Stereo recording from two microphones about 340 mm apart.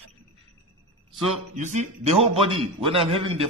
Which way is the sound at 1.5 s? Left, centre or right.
Right.